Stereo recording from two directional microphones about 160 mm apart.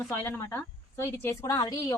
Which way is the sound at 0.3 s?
15° left (ahead or behind).